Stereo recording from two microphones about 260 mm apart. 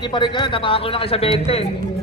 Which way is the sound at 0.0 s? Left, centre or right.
Centre.